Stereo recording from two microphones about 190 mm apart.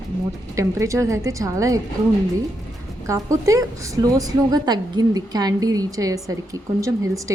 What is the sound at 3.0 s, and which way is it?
A woman's voice, 15° right (ahead or behind).